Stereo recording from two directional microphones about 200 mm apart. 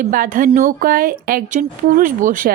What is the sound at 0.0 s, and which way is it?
A woman's voice, 45° right (ahead or behind).